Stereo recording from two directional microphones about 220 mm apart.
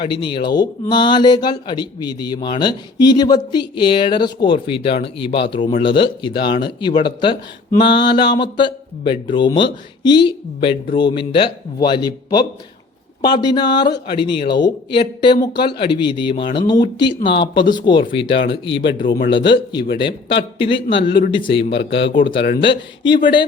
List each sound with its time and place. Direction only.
0.0 s speech: 20° left (ahead or behind)
21.0 s speech: 50° left (ahead or behind)
21.3 s speech: 25° left (ahead or behind)
21.8 s speech: 55° left (ahead or behind)
22.1 s speech: 25° left (ahead or behind)